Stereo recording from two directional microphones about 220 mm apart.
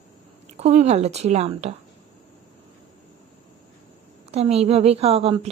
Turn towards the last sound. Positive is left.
turn(degrees=-25)  # may be behind; listen again after turning